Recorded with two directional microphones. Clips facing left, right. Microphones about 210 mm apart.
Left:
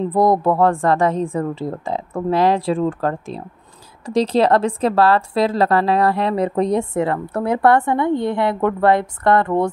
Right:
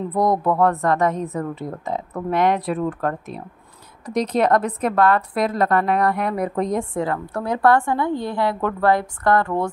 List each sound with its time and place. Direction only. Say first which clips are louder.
0.1 s a woman's voice: left 3 dB; 30° left (ahead or behind)